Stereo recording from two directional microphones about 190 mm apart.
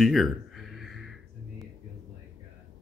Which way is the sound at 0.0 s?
Centre (ahead or behind).